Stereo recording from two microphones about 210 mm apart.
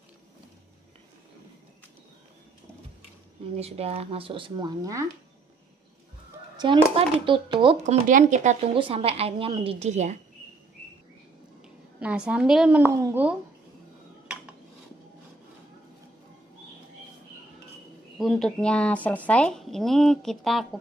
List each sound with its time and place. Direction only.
3.5 s speech: 30° right (ahead or behind)
6.5 s speech: 20° right (ahead or behind)
7.8 s speech: 35° right (ahead or behind)
8.7 s speech: 25° right (ahead or behind)
12.0 s speech: 5° right (ahead or behind)
14.2 s dishes: 5° right (ahead or behind)
18.1 s speech: centre (ahead or behind)